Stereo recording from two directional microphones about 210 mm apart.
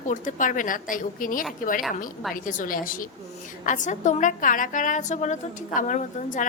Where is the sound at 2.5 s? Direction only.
40° left (ahead or behind).